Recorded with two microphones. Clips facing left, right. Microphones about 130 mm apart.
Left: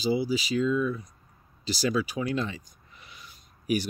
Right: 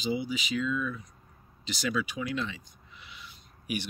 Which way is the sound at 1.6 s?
35° left (ahead or behind).